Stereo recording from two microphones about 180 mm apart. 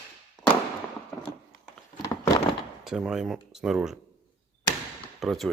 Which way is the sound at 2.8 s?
5° right (ahead or behind).